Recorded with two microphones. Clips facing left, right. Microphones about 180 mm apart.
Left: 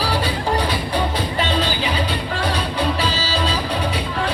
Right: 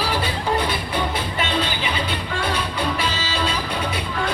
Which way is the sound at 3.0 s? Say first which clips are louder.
Left 3 dB; 35° left (ahead or behind).